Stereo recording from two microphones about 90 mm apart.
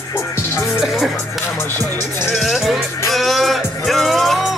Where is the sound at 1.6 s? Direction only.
25° left (ahead or behind).